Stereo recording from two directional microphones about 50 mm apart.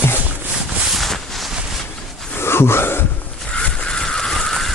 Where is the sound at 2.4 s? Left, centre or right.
Left.